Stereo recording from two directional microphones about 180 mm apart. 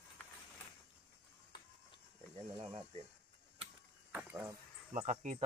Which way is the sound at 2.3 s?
30° right (ahead or behind).